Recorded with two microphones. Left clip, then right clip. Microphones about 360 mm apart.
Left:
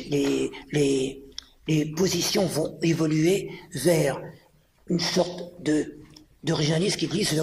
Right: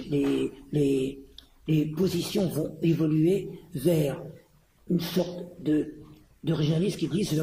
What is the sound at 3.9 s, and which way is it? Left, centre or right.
Speech, left.